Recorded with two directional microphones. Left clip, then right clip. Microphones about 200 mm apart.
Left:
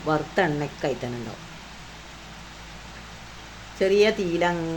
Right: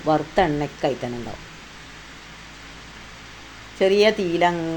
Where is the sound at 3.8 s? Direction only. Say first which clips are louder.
Right 3 dB; 15° right (ahead or behind).